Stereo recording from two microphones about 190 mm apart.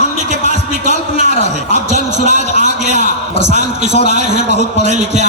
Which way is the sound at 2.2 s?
40° right (ahead or behind).